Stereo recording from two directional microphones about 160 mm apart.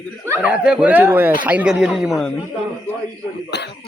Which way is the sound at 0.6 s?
5° right (ahead or behind).